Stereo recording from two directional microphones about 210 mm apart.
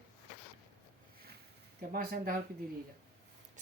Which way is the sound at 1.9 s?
45° right (ahead or behind).